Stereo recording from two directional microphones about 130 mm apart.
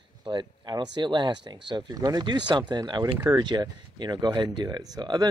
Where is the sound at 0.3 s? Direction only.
35° right (ahead or behind).